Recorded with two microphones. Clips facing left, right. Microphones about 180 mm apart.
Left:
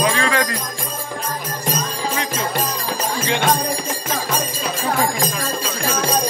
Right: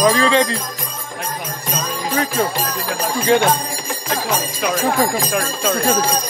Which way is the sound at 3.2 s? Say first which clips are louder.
Right 8 dB; 45° right (ahead or behind).